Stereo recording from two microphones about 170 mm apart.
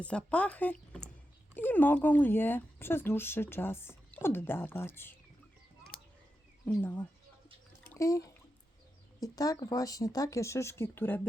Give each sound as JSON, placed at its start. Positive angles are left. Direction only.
{"t": 0.0, "sound": "speech", "side_deg": 5}
{"t": 7.9, "sound": "speech", "side_deg": 20}